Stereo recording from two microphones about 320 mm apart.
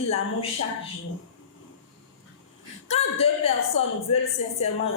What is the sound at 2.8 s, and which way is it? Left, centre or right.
A woman's voice, centre.